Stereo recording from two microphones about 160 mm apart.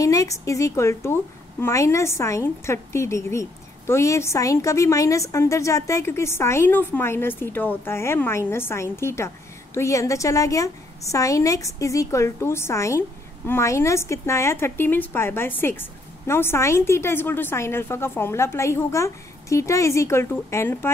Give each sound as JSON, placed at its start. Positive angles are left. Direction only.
{"t": 0.0, "sound": "a woman's voice", "side_deg": 20}